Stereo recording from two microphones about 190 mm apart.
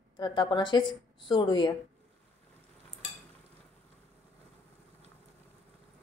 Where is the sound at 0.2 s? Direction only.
25° left (ahead or behind).